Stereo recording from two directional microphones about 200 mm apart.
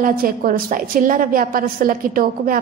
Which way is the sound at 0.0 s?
45° right (ahead or behind).